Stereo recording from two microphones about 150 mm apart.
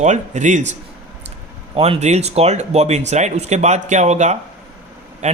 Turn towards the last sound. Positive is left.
turn(degrees=-50)  # may be behind; listen again after turning